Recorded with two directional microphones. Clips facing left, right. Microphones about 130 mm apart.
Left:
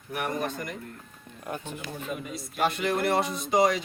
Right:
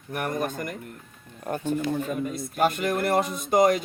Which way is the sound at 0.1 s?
50° right (ahead or behind).